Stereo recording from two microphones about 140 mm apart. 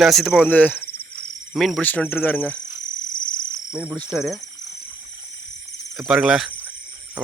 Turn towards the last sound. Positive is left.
turn(degrees=-5)  # may be behind; listen again after turning